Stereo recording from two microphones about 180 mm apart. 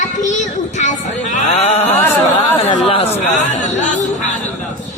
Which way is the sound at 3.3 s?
40° left (ahead or behind).